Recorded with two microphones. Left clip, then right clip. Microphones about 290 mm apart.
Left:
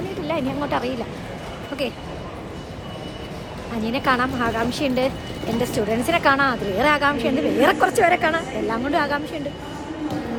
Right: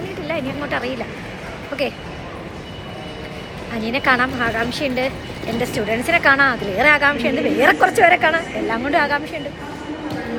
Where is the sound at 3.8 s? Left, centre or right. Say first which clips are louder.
Right 4 dB; centre.